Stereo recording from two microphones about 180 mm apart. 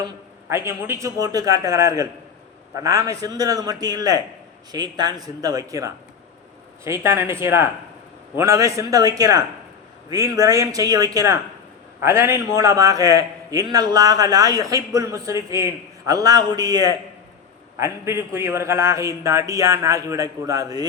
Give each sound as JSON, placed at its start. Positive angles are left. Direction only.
{"t": 0.0, "sound": "a man's voice", "side_deg": -15}